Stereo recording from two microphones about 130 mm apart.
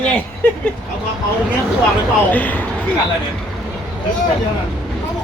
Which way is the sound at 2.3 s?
15° left (ahead or behind).